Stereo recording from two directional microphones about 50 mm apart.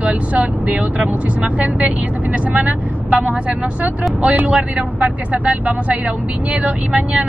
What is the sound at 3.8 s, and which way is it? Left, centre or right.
Speech, right.